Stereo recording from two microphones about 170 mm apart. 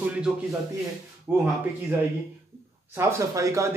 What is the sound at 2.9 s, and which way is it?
Speech, 15° right (ahead or behind).